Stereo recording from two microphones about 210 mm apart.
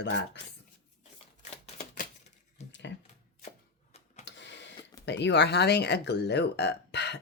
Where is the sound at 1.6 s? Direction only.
35° left (ahead or behind).